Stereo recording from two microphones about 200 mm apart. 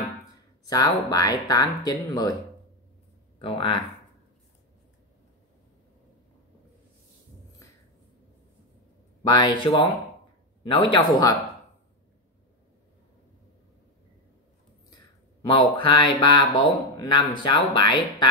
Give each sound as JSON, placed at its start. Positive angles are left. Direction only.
{"t": 0.7, "sound": "speech", "side_deg": 20}
{"t": 3.3, "sound": "speech", "side_deg": 25}
{"t": 9.2, "sound": "speech", "side_deg": 20}
{"t": 15.8, "sound": "speech", "side_deg": 25}